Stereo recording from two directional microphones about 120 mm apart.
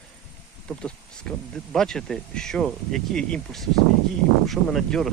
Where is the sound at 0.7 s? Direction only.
5° left (ahead or behind).